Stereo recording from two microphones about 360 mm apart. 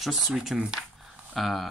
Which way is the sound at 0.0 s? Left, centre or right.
Centre.